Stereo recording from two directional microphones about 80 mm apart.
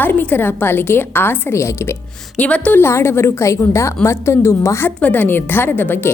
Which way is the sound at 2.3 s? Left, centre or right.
Centre.